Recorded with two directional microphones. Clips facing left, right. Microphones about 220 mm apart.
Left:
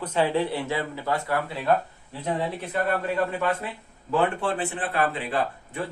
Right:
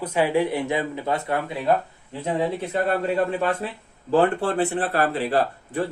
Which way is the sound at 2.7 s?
30° right (ahead or behind).